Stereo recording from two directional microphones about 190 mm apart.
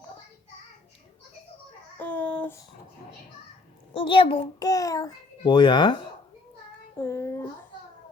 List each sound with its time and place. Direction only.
2.0 s a sound: 10° left (ahead or behind)
3.9 s a child's voice: 25° left (ahead or behind)
7.0 s child singing: 15° left (ahead or behind)